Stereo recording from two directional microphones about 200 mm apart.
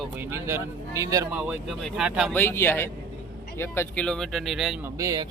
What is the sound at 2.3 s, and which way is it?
Speech, 10° left (ahead or behind).